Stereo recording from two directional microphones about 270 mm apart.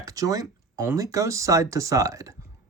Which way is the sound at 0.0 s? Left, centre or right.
Centre.